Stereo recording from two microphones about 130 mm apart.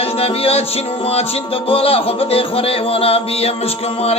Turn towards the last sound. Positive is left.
turn(degrees=50)  # may be behind; listen again after turning